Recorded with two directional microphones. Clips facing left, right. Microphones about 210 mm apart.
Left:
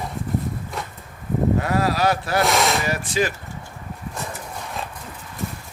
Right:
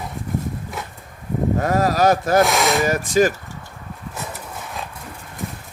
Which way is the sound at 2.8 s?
45° right (ahead or behind).